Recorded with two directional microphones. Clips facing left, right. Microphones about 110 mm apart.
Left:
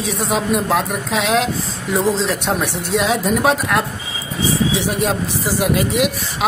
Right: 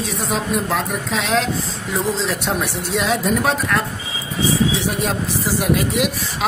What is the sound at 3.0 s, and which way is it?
Speech, centre (ahead or behind).